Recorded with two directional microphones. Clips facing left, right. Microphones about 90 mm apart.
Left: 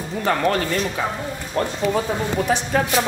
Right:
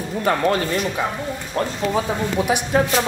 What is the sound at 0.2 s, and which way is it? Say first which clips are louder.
Speech: right 1 dB; 10° right (ahead or behind).